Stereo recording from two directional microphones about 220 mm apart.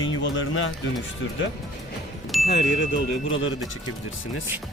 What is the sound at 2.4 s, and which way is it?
Speech, 55° left (ahead or behind).